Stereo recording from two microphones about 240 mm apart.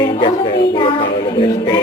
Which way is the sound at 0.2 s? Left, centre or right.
Left.